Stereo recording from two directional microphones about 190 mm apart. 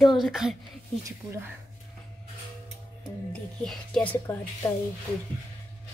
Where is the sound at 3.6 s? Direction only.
Centre (ahead or behind).